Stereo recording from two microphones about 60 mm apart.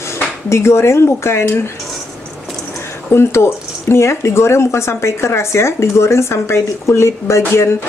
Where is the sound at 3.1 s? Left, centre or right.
Left.